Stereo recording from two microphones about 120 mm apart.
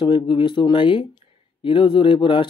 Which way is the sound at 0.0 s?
40° left (ahead or behind).